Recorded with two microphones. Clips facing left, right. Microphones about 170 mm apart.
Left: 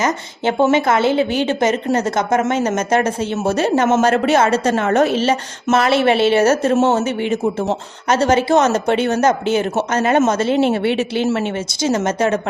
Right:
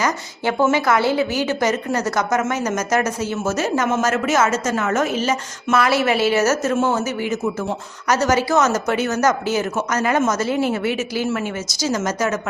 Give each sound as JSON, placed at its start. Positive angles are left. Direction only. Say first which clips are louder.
{"t": 0.0, "sound": "a woman's voice", "louder": "left 3 dB", "side_deg": 25}